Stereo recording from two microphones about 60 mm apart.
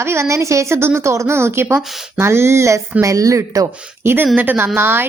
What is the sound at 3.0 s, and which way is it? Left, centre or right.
Speech, right.